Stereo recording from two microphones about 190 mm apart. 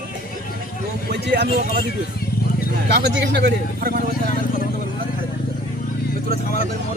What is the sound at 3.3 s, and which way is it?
Speech, 55° right (ahead or behind).